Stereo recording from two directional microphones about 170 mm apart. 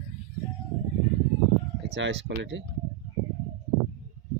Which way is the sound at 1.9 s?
90° right.